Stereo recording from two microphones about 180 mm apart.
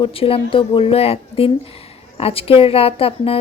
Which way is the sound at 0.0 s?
30° left (ahead or behind).